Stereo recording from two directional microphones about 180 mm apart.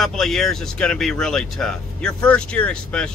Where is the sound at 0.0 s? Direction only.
Centre (ahead or behind).